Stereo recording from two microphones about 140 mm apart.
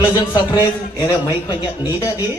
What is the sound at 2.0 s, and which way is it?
Speech, 25° left (ahead or behind).